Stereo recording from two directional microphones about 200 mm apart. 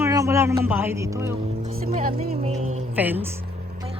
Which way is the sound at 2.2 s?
35° right (ahead or behind).